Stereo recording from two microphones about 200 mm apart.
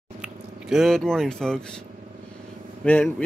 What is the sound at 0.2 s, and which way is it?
Speech, centre (ahead or behind).